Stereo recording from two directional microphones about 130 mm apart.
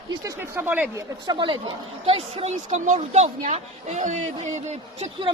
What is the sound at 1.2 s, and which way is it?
A woman's voice, 35° right (ahead or behind).